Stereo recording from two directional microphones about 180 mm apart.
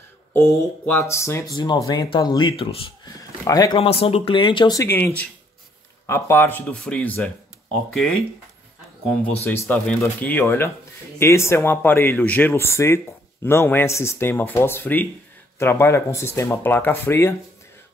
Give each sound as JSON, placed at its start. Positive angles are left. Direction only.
{"t": 0.3, "sound": "speech", "side_deg": 15}
{"t": 9.2, "sound": "speech", "side_deg": 15}